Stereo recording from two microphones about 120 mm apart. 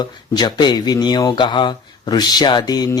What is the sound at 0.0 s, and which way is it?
A man's voice, 35° left (ahead or behind).